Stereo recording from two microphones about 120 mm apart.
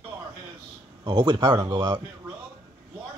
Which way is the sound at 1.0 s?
35° right (ahead or behind).